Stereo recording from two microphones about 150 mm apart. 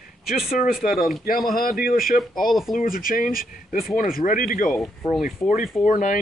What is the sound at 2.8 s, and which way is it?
Speech, 70° left (ahead or behind).